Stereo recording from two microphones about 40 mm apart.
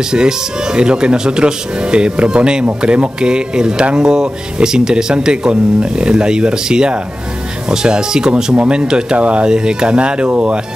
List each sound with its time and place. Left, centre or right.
0.1 s speech: centre
9.5 s speech: centre